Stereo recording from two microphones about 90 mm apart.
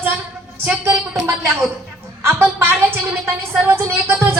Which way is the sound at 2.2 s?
25° right (ahead or behind).